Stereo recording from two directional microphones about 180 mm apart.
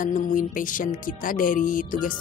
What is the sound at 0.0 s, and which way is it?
Speech, 45° left (ahead or behind).